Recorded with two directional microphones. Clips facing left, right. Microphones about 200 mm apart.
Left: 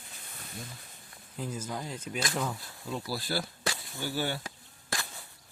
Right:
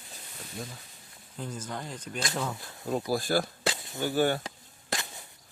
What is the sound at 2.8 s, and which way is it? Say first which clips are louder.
Speech: right 7 dB; 50° right (ahead or behind).